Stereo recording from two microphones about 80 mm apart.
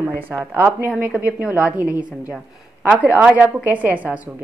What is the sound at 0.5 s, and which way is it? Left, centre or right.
A woman's voice, right.